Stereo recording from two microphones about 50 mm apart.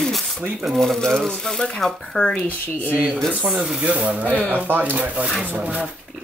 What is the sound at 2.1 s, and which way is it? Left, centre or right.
Speech, left.